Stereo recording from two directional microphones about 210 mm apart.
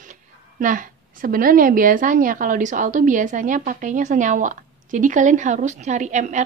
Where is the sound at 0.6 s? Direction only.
40° right (ahead or behind).